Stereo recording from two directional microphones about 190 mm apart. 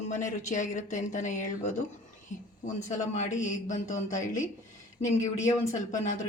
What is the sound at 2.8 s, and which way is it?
A woman's voice, 40° left (ahead or behind).